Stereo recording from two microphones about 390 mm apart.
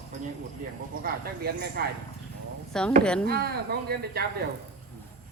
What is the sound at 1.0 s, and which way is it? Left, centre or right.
Speech, right.